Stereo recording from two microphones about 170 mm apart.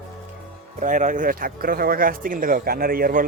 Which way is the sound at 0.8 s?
50° right (ahead or behind).